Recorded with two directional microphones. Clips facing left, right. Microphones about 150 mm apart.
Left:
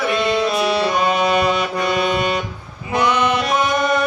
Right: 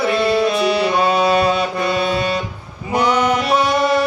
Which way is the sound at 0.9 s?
30° right (ahead or behind).